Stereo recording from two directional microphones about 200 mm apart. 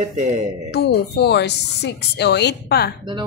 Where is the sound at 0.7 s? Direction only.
55° left (ahead or behind).